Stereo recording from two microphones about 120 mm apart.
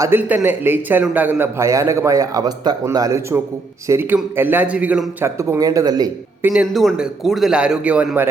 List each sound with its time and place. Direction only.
0.0 s a man's voice: 15° right (ahead or behind)
5.4 s a man's voice: 25° right (ahead or behind)
6.5 s a man's voice: 5° right (ahead or behind)